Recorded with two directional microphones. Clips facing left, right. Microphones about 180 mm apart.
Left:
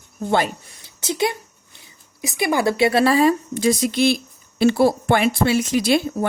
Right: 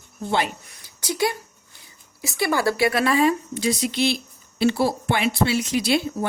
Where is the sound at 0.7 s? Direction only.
25° left (ahead or behind).